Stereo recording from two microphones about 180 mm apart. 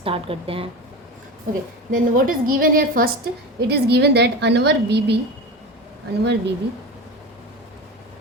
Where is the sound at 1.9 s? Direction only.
50° right (ahead or behind).